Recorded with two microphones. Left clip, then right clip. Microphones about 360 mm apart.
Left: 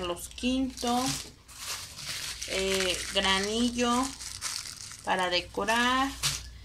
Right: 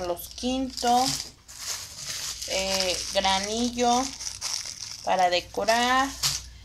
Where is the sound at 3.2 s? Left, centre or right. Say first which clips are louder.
Right 2 dB; centre.